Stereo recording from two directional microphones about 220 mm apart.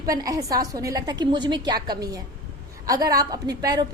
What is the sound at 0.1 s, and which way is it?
A woman's voice, 15° right (ahead or behind).